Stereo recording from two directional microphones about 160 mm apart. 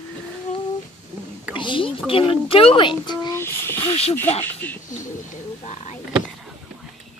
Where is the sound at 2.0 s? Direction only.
35° left (ahead or behind).